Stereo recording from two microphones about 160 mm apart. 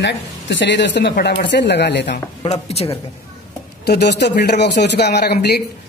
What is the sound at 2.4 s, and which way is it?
Speech, 40° left (ahead or behind).